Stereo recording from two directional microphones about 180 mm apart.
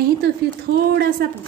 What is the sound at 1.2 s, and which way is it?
Speech, 55° right (ahead or behind).